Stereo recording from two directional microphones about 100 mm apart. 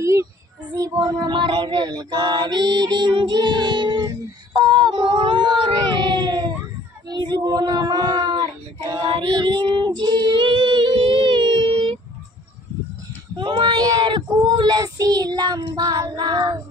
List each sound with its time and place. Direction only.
0.0 s child singing: 30° right (ahead or behind)
0.7 s female singing: 40° right (ahead or behind)
4.6 s a sound: 50° right (ahead or behind)
9.0 s child singing: 50° right (ahead or behind)
13.4 s child singing: 50° right (ahead or behind)